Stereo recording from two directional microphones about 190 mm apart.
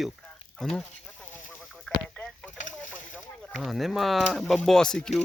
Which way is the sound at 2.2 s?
5° left (ahead or behind).